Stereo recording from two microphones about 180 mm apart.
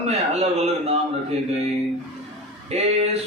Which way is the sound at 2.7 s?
35° right (ahead or behind).